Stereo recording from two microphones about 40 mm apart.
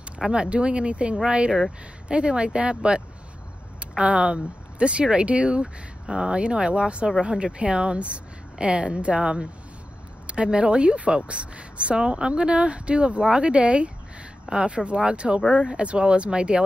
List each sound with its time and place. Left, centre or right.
0.2 s a woman's voice: right